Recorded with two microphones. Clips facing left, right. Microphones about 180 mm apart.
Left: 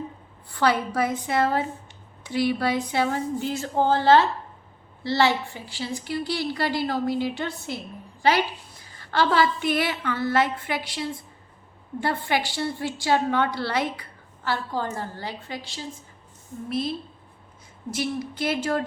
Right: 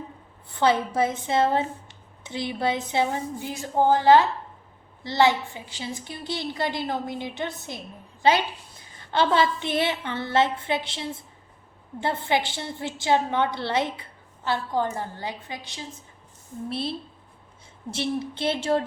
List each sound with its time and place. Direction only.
0.6 s a woman's voice: 25° right (ahead or behind)
9.0 s a woman's voice: 20° right (ahead or behind)
16.6 s speech: 30° right (ahead or behind)
17.9 s a woman's voice: 25° right (ahead or behind)